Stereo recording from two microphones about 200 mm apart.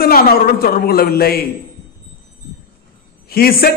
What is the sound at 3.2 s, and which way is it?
Speech, 50° left (ahead or behind).